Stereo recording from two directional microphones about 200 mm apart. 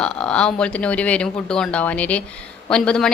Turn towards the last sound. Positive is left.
turn(degrees=5)  # may be behind; listen again after turning